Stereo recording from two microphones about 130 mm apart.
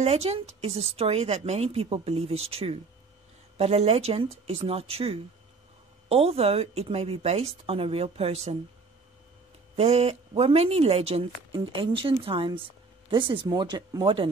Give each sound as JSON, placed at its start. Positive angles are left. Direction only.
{"t": 0.0, "sound": "a woman's voice", "side_deg": -55}
{"t": 9.8, "sound": "a woman's voice", "side_deg": -50}